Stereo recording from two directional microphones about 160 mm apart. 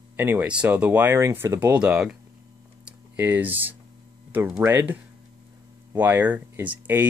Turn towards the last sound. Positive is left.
turn(degrees=-10)  # may be behind; listen again after turning